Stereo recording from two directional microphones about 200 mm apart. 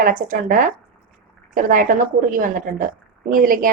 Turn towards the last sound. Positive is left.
turn(degrees=-45)  # may be behind; listen again after turning